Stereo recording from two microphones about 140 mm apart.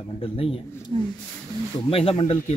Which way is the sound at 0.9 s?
40° right (ahead or behind).